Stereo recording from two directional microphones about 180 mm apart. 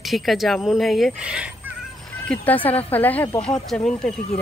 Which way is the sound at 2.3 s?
10° left (ahead or behind).